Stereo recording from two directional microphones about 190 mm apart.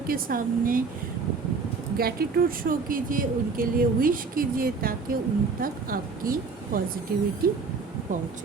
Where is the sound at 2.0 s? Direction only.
55° right (ahead or behind).